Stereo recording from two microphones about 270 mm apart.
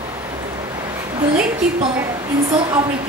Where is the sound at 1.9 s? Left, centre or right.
Centre.